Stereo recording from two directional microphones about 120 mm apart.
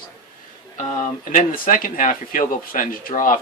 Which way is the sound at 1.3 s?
90° left.